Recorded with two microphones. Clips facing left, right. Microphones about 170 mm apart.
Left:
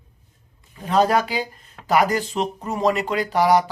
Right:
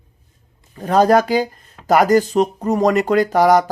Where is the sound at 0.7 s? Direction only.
40° right (ahead or behind).